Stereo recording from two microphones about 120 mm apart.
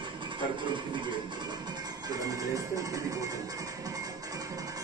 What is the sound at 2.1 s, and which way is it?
Music, 30° right (ahead or behind).